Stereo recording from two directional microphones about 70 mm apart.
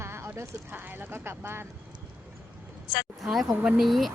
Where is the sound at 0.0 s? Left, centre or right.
Right.